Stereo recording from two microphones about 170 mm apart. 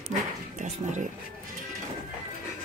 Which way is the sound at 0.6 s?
45° right (ahead or behind).